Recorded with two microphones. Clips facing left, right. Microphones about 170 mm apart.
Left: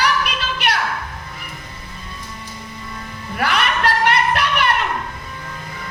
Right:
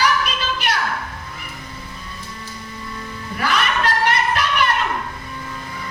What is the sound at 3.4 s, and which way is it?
Music, 60° left (ahead or behind).